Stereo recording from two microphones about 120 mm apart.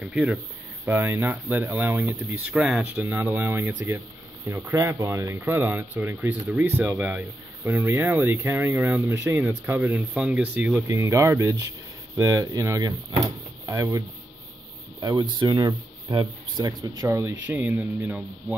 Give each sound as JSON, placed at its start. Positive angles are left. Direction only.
{"t": 0.0, "sound": "speech", "side_deg": -10}
{"t": 0.8, "sound": "speech", "side_deg": -20}
{"t": 3.0, "sound": "speech", "side_deg": -15}
{"t": 10.9, "sound": "speech", "side_deg": -25}
{"t": 17.2, "sound": "speech", "side_deg": -20}